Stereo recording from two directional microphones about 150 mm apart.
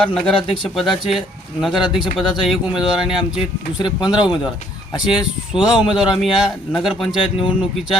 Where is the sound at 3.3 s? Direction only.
30° left (ahead or behind).